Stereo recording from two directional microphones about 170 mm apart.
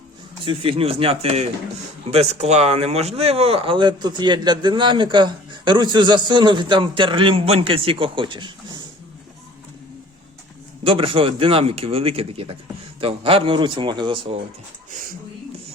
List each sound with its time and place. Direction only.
0.4 s speech: 30° right (ahead or behind)
10.8 s speech: 30° right (ahead or behind)
14.8 s a sound: 50° right (ahead or behind)